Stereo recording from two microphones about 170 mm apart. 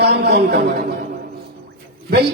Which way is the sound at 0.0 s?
75° right (ahead or behind).